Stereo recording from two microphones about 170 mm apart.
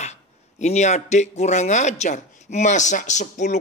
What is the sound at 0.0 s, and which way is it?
A man's voice, 40° left (ahead or behind).